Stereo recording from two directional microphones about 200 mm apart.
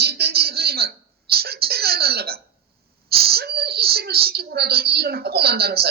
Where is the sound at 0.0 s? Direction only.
55° right (ahead or behind).